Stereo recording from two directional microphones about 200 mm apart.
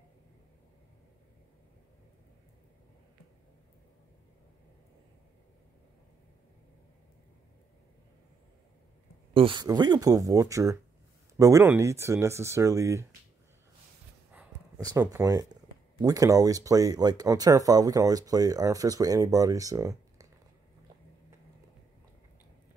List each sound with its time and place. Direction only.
9.3 s speech: 25° right (ahead or behind)
14.8 s speech: 20° right (ahead or behind)